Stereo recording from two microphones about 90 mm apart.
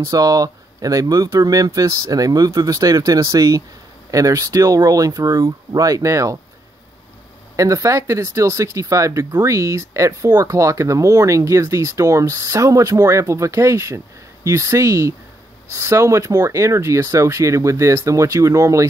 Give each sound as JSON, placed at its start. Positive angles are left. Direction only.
{"t": 0.0, "sound": "speech", "side_deg": -40}
{"t": 7.5, "sound": "speech", "side_deg": -35}